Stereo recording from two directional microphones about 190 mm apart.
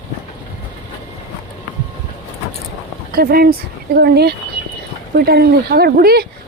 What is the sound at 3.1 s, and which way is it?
Speech, 50° right (ahead or behind).